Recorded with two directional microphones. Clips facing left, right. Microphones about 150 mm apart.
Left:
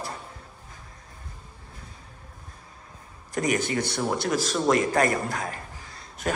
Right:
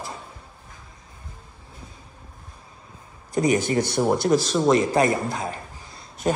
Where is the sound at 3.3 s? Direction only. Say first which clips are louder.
Right 5 dB; 30° right (ahead or behind).